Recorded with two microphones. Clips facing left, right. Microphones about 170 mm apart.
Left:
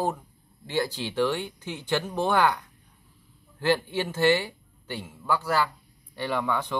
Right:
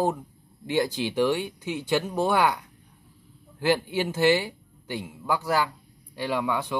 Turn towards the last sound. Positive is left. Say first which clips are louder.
# right 1 dB
turn(degrees=-10)  # may be behind; listen again after turning